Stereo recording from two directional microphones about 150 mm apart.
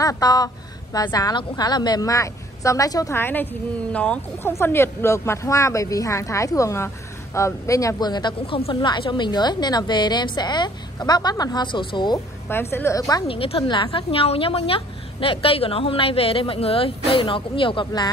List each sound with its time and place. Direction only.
0.0 s speech: 25° left (ahead or behind)
12.7 s a woman's voice: 15° left (ahead or behind)
13.3 s a woman's voice: 40° left (ahead or behind)